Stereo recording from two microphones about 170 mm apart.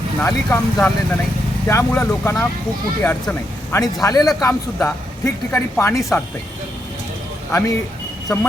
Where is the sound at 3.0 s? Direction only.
10° left (ahead or behind).